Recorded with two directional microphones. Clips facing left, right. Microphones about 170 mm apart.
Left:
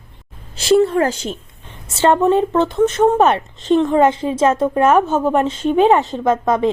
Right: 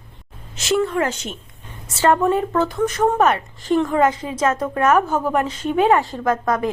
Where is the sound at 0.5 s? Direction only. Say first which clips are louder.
Left 6 dB; 35° left (ahead or behind).